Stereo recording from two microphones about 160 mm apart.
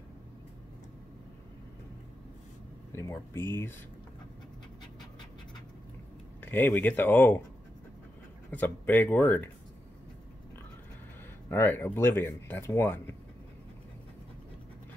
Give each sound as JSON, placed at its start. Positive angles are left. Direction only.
{"t": 2.9, "sound": "speech", "side_deg": 15}
{"t": 6.4, "sound": "speech", "side_deg": 10}
{"t": 8.5, "sound": "speech", "side_deg": 10}
{"t": 11.4, "sound": "speech", "side_deg": 15}